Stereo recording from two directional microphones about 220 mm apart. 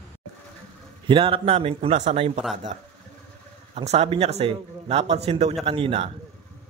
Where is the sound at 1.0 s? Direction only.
25° right (ahead or behind).